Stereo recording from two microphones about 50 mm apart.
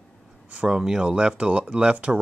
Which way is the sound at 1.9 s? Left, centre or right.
Right.